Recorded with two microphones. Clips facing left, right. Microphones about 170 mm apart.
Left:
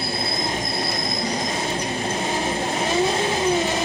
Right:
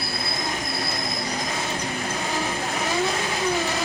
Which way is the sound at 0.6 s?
30° left (ahead or behind).